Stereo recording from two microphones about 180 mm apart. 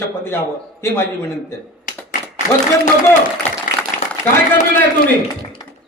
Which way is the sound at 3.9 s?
50° left (ahead or behind).